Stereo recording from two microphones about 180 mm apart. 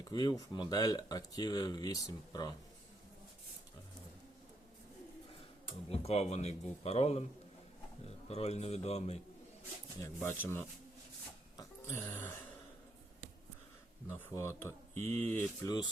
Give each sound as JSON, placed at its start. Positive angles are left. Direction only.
{"t": 0.0, "sound": "speech", "side_deg": 25}
{"t": 5.9, "sound": "a man's voice", "side_deg": 35}
{"t": 10.0, "sound": "speech", "side_deg": 15}
{"t": 11.5, "sound": "throat clearing", "side_deg": 15}
{"t": 14.1, "sound": "speech", "side_deg": 15}
{"t": 14.9, "sound": "speech", "side_deg": -40}
{"t": 15.2, "sound": "speech", "side_deg": 10}